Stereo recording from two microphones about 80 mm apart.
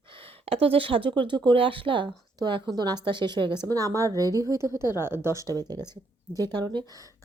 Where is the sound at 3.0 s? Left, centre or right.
Right.